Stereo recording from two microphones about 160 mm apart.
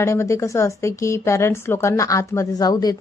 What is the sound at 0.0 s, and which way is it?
A woman's voice, 15° left (ahead or behind).